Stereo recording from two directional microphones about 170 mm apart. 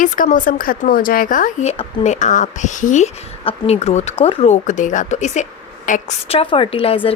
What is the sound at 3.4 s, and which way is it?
A woman's voice, 35° left (ahead or behind).